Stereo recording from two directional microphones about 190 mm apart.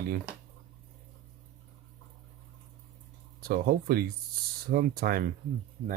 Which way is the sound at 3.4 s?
50° right (ahead or behind).